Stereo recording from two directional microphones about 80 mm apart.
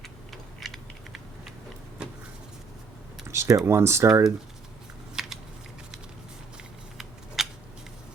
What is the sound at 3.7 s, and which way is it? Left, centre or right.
Speech, right.